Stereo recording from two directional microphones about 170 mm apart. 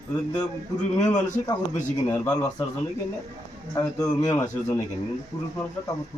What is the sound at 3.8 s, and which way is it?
A man's voice, 20° left (ahead or behind).